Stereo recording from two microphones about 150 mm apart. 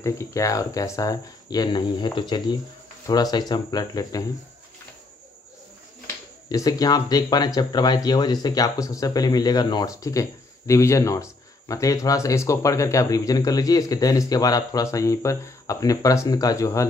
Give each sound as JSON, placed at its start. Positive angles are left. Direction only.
{"t": 0.0, "sound": "speech", "side_deg": 20}
{"t": 6.5, "sound": "speech", "side_deg": 25}